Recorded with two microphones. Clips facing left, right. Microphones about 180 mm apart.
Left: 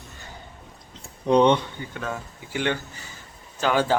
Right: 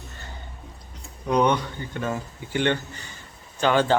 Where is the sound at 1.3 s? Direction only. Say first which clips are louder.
Left 4 dB; 30° left (ahead or behind).